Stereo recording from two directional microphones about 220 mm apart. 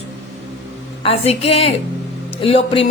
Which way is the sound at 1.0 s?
25° left (ahead or behind).